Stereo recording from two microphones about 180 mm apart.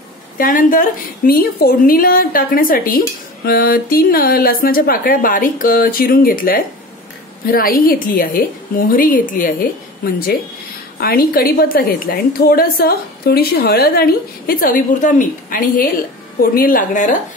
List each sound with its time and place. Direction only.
0.4 s a woman's voice: 50° left (ahead or behind)